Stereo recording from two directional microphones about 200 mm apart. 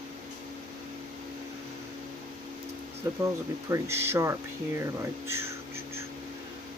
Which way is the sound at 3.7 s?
15° right (ahead or behind).